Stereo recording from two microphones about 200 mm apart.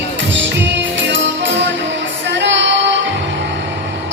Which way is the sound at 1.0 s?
65° right (ahead or behind).